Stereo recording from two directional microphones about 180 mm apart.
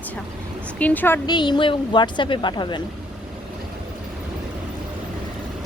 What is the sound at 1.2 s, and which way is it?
Speech, 25° left (ahead or behind).